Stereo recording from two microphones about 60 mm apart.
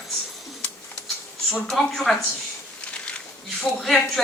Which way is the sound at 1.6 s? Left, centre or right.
Centre.